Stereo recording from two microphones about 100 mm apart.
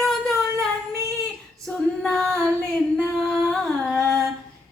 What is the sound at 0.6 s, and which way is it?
Singing, 30° right (ahead or behind).